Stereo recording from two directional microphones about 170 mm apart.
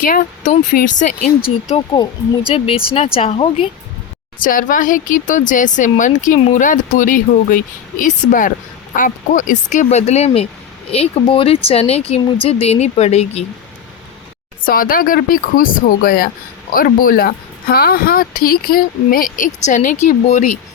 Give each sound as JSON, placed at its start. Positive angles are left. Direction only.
{"t": 0.0, "sound": "speech", "side_deg": 55}
{"t": 3.2, "sound": "speech", "side_deg": 35}
{"t": 4.4, "sound": "speech", "side_deg": 55}
{"t": 14.6, "sound": "speech", "side_deg": 55}